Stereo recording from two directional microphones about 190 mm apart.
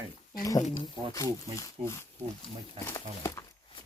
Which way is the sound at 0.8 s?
20° left (ahead or behind).